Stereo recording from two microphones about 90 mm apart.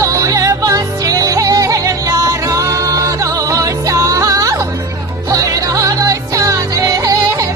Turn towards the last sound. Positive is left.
turn(degrees=-40)  # may be behind; listen again after turning